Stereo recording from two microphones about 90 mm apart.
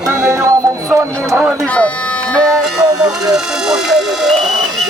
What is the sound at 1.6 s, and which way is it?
Speech, 15° left (ahead or behind).